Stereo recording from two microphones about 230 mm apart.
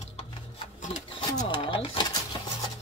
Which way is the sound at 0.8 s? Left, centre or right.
Left.